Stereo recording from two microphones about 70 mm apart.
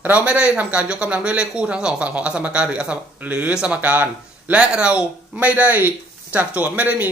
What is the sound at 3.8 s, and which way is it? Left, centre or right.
Speech, right.